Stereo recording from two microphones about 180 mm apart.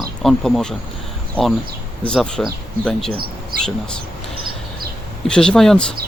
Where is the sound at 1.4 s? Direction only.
10° right (ahead or behind).